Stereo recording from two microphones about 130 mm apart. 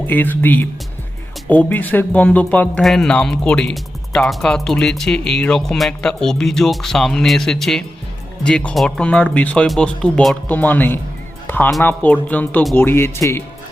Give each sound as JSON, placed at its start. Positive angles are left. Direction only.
{"t": 0.1, "sound": "speech", "side_deg": 15}